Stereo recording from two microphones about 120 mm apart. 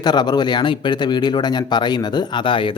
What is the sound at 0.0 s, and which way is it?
Speech, 35° left (ahead or behind).